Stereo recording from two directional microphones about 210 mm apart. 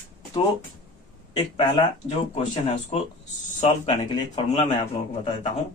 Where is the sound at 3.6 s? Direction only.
30° left (ahead or behind).